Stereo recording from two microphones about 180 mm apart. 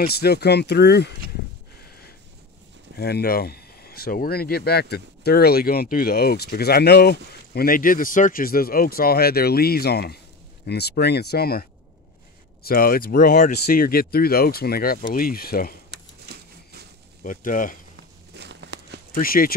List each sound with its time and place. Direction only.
0.0 s speech: 60° left (ahead or behind)
1.9 s a sound: 60° left (ahead or behind)
3.0 s speech: 60° left (ahead or behind)
12.6 s speech: 55° left (ahead or behind)
17.2 s speech: 50° left (ahead or behind)
18.3 s a sound: 70° right (ahead or behind)
19.1 s speech: 55° left (ahead or behind)